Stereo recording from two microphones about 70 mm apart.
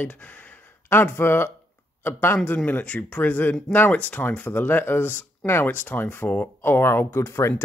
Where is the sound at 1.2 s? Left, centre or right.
Left.